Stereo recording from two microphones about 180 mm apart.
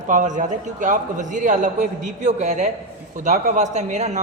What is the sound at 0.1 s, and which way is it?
A man's voice, 45° right (ahead or behind).